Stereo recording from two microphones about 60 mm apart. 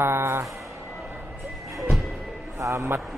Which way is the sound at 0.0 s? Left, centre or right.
Right.